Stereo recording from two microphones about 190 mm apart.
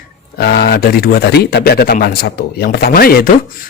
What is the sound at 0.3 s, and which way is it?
Speech, 60° left (ahead or behind).